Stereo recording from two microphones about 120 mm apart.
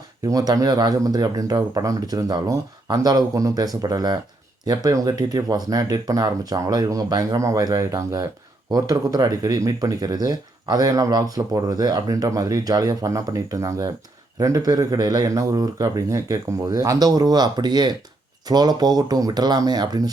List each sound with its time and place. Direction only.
0.3 s speech: 30° right (ahead or behind)